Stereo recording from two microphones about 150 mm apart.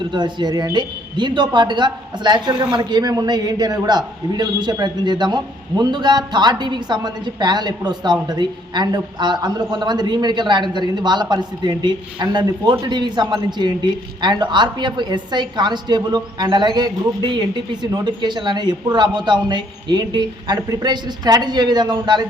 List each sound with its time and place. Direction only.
0.1 s a man's voice: 30° right (ahead or behind)